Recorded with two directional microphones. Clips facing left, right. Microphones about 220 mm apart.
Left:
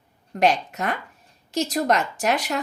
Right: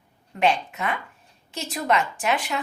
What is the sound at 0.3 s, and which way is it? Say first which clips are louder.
A woman's voice: left 2 dB; 40° left (ahead or behind).